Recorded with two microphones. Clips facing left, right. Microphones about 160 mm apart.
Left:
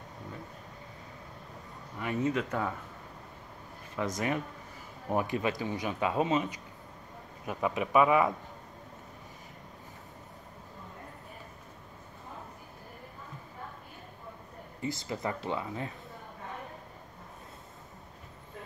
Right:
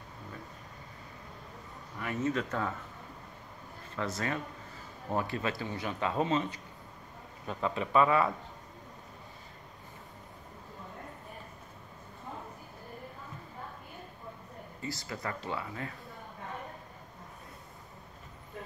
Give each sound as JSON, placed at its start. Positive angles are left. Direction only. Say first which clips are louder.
{"t": 2.0, "sound": "speech", "louder": "left 2 dB", "side_deg": 15}
{"t": 3.9, "sound": "speech", "louder": "left 3 dB", "side_deg": 15}
{"t": 14.8, "sound": "speech", "louder": "left 5 dB", "side_deg": 20}